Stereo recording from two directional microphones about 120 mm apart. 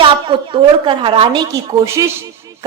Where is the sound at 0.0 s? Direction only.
45° right (ahead or behind); by 2.6 s 25° right (ahead or behind).